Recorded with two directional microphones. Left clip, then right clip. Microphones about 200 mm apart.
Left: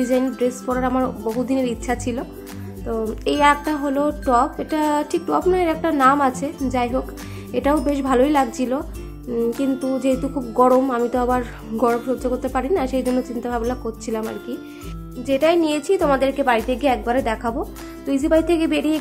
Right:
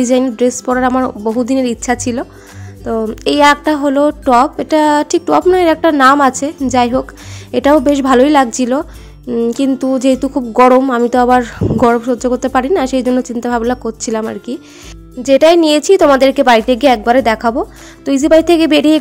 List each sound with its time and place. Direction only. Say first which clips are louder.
0.0 s a woman's voice: right 8 dB; 40° right (ahead or behind)